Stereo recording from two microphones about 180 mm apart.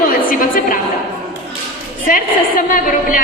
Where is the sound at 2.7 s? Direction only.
50° left (ahead or behind).